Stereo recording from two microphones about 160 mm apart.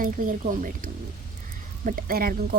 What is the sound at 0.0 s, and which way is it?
Speech, 60° right (ahead or behind).